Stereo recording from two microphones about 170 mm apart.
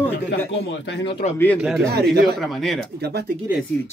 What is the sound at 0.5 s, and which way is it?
Speech, 90° left.